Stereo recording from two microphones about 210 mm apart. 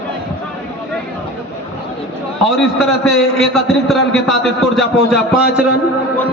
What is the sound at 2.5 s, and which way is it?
A man's voice, centre (ahead or behind).